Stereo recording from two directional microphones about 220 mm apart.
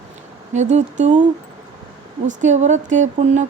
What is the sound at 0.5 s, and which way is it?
Speech, 30° right (ahead or behind).